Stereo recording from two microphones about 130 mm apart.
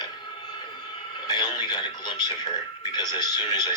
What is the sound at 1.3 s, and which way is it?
Speech, 35° left (ahead or behind).